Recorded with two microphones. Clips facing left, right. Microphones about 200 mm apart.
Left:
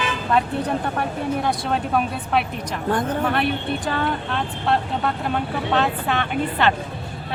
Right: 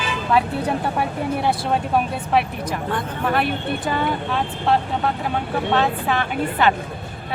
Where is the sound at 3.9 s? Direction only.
10° right (ahead or behind).